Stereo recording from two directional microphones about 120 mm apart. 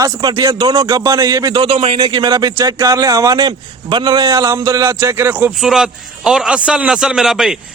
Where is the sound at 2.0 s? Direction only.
35° right (ahead or behind); by 5.5 s 15° right (ahead or behind).